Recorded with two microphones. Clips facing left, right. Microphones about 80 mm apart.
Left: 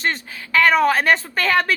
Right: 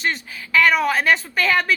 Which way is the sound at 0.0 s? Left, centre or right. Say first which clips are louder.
Left 1 dB; left.